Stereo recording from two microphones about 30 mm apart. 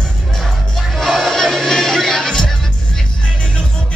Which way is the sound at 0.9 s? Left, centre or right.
Centre.